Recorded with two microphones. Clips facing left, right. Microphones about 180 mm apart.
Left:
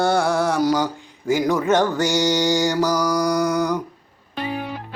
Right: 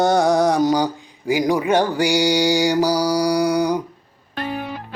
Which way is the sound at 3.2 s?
10° right (ahead or behind).